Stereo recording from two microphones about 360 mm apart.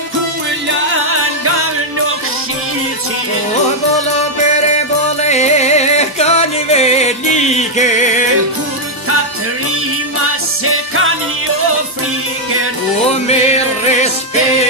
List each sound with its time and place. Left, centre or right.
4.5 s music: centre
10.6 s music: right
13.3 s music: centre